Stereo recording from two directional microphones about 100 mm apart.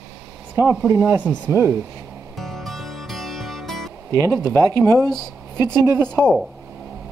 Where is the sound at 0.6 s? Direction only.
25° right (ahead or behind).